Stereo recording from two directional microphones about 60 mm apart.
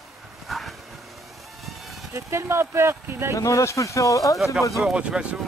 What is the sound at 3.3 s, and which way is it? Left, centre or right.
Speech, left.